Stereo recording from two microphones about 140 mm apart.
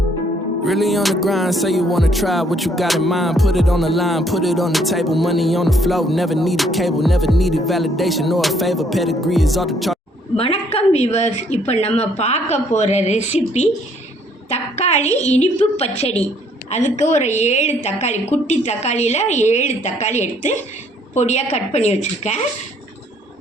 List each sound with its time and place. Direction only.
0.6 s music: centre (ahead or behind)
10.3 s a woman's voice: 45° left (ahead or behind)